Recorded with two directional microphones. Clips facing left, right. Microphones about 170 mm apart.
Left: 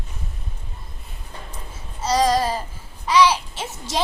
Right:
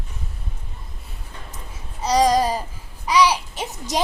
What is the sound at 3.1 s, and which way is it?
Speech, 15° right (ahead or behind).